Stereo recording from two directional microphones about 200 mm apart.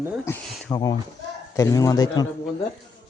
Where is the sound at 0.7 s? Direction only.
20° left (ahead or behind).